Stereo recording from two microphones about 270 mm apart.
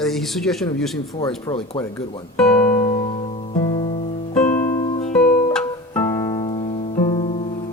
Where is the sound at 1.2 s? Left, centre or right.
Centre.